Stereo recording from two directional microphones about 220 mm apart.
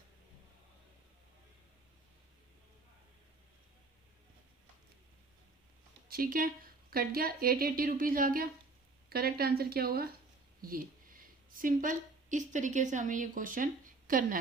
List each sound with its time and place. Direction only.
6.1 s a woman's voice: 40° right (ahead or behind)